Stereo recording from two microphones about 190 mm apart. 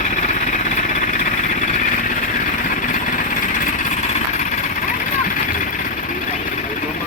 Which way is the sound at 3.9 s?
40° left (ahead or behind).